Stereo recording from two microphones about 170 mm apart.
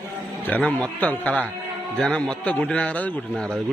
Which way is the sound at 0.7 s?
10° left (ahead or behind).